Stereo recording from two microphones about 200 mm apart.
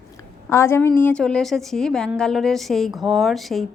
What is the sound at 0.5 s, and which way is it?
A woman's voice, 10° left (ahead or behind).